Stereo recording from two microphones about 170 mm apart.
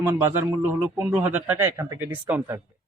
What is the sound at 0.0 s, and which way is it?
Speech, 10° right (ahead or behind).